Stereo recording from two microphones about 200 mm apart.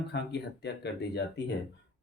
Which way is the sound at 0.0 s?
55° left (ahead or behind).